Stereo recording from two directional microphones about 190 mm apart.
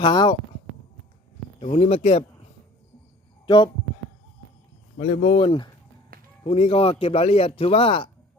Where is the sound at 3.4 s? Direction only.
25° left (ahead or behind).